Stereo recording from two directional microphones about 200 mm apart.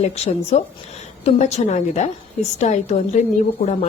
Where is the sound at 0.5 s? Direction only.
35° left (ahead or behind).